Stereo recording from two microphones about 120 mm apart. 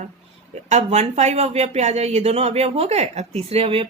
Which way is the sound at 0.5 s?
65° right (ahead or behind).